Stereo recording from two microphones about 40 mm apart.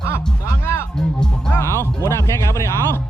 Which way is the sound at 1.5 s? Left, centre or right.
Left.